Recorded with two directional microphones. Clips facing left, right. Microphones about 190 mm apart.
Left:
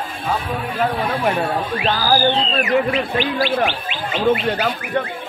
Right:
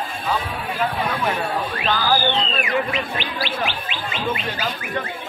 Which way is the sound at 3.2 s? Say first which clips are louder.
Left 7 dB; 50° left (ahead or behind).